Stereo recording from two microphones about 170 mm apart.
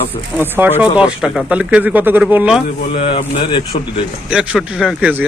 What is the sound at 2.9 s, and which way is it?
Speech, 35° left (ahead or behind).